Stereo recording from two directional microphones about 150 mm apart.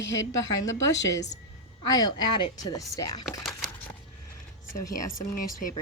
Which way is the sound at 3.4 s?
5° left (ahead or behind).